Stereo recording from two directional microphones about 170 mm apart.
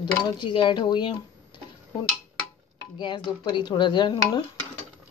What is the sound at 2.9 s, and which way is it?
Speech, 30° left (ahead or behind).